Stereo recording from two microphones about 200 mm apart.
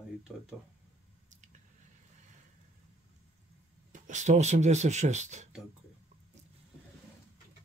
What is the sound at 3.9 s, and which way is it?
Speech, 35° right (ahead or behind).